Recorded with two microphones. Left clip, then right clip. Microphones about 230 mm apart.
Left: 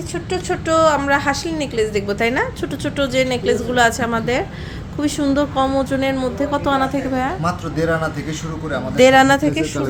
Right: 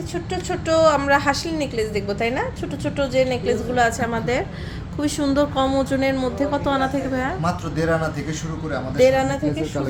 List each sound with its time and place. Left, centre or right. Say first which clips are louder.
0.1 s a woman's voice: left 4 dB; centre
7.4 s speech: left 3 dB; centre
9.0 s speech: left 6 dB; left